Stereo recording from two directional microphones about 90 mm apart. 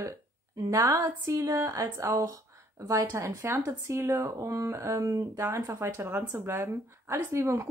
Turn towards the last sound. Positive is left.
turn(degrees=-35)  # may be behind; listen again after turning